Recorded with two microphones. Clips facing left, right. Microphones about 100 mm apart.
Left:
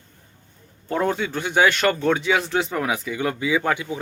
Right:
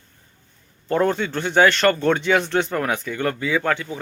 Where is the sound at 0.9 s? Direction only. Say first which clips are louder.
Right 3 dB; 5° left (ahead or behind).